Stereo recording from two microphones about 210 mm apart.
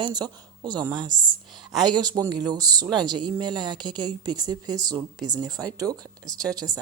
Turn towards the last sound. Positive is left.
turn(degrees=-20)  # may be behind; listen again after turning